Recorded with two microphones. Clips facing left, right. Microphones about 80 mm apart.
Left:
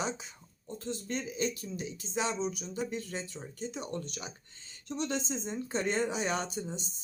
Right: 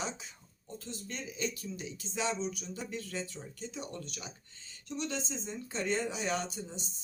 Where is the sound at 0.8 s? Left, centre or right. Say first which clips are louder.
Left 7 dB; left.